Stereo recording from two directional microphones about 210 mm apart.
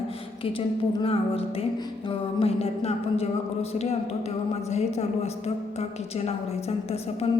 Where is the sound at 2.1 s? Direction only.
30° left (ahead or behind).